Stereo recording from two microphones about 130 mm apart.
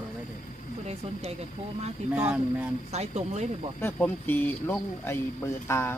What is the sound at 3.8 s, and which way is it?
A woman's voice, 15° left (ahead or behind).